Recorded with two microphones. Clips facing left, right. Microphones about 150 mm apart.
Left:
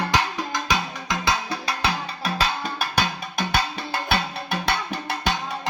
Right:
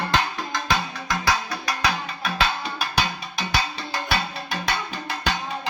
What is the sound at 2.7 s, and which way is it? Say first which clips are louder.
Music: left 1 dB; 55° left (ahead or behind).